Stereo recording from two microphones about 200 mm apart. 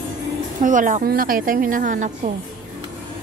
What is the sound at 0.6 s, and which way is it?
A woman's voice, 40° right (ahead or behind).